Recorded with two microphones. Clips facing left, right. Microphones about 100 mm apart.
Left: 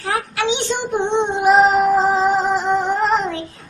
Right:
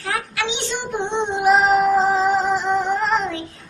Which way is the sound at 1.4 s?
15° left (ahead or behind).